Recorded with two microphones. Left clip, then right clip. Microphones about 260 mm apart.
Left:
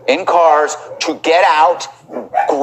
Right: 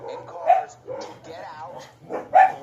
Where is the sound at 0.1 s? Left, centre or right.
Left.